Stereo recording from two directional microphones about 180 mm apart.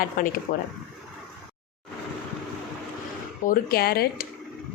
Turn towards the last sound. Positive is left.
turn(degrees=60)  # may be behind; listen again after turning